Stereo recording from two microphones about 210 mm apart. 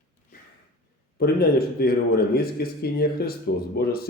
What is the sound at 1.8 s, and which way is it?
A man's voice, 45° left (ahead or behind).